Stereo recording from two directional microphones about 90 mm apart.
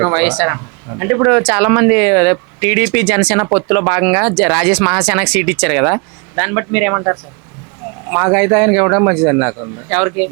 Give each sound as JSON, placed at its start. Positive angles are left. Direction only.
{"t": 0.0, "sound": "speech", "side_deg": -15}